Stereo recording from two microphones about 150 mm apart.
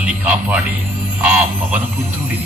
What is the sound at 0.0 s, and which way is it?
Speech, 10° right (ahead or behind).